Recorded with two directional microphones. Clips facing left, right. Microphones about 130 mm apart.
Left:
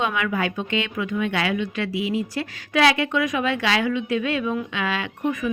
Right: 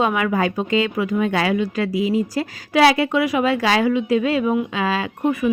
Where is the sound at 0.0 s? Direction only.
35° right (ahead or behind).